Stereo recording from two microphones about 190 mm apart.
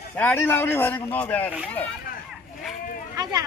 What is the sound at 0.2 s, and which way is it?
A man's voice, 10° left (ahead or behind).